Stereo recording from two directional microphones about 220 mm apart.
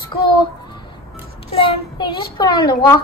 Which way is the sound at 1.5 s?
25° left (ahead or behind).